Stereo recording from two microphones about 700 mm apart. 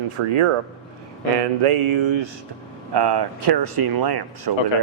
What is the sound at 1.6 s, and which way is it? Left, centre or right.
Speech, right.